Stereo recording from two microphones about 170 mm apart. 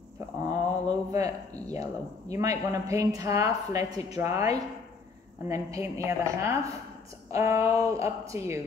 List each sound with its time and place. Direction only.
0.5 s a sound: 20° right (ahead or behind)
1.7 s speech: 20° right (ahead or behind)
5.5 s speech: 20° right (ahead or behind)